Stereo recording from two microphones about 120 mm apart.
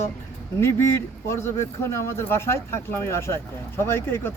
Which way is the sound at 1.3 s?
20° left (ahead or behind).